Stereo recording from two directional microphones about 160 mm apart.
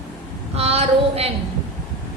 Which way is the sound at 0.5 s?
40° right (ahead or behind).